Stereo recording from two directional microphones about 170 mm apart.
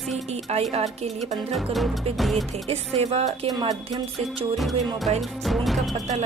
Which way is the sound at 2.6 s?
40° right (ahead or behind).